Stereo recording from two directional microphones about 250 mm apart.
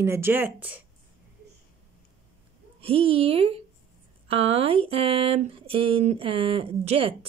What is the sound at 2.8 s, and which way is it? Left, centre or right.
Speech, right.